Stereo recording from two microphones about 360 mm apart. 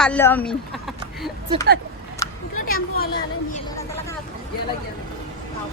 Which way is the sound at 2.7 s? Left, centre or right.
Left.